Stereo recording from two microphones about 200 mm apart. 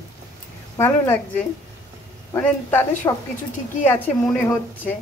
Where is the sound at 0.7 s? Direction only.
10° left (ahead or behind).